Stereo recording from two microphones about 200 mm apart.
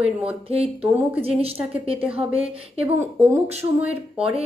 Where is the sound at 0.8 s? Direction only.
10° right (ahead or behind).